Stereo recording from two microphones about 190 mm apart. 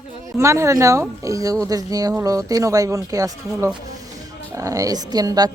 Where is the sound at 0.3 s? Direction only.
15° right (ahead or behind).